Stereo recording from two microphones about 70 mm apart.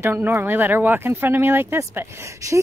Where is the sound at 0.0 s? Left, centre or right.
Right.